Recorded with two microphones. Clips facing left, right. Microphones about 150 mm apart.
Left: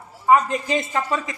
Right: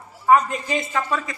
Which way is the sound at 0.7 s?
20° left (ahead or behind).